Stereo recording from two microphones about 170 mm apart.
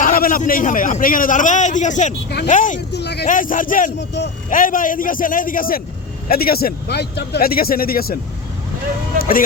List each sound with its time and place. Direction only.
0.0 s a man's voice: 55° left (ahead or behind)
2.9 s a sound: 80° left
3.2 s a man's voice: 50° left (ahead or behind)
9.1 s vehicle: 55° left (ahead or behind)